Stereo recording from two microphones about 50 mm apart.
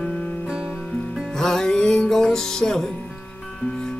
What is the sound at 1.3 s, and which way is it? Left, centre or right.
Music, centre.